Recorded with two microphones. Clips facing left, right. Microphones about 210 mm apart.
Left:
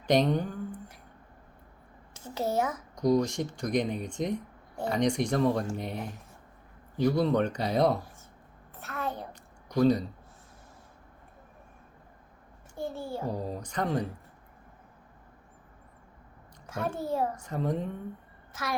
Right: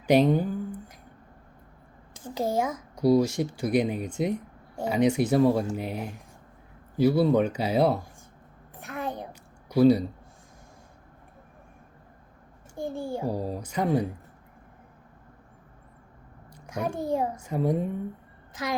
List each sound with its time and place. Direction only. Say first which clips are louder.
0.0 s speech: right 4 dB; 5° right (ahead or behind)
2.1 s speech: right 2 dB; 15° right (ahead or behind)
8.7 s a sound: right 2 dB; 15° right (ahead or behind)
12.7 s speech: right 3 dB; 15° right (ahead or behind)
16.6 s a woman's voice: right 3 dB; 15° right (ahead or behind)